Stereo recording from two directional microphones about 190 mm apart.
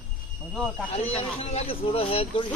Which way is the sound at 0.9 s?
35° left (ahead or behind).